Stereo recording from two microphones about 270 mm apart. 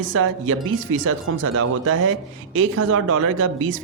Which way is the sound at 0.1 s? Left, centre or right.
Right.